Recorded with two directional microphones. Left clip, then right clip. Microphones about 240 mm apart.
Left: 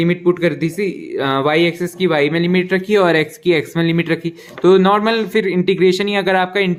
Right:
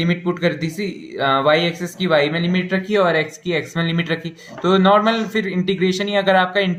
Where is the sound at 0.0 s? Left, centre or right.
Left.